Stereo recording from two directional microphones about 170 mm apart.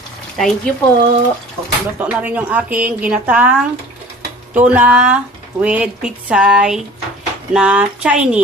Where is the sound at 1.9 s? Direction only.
10° right (ahead or behind).